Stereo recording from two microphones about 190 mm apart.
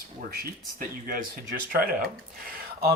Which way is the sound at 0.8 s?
45° right (ahead or behind).